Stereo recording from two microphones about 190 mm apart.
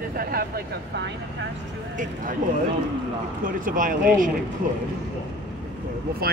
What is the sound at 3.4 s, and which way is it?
Speech, 45° right (ahead or behind).